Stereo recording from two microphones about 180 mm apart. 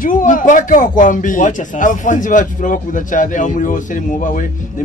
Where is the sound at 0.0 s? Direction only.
45° left (ahead or behind).